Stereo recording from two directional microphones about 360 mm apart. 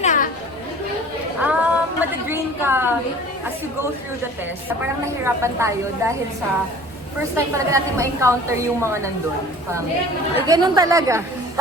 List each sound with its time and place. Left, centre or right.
0.0 s chatter: left
1.4 s a sound: centre
5.2 s a woman's voice: centre
7.3 s a woman's voice: centre
10.4 s a woman's voice: centre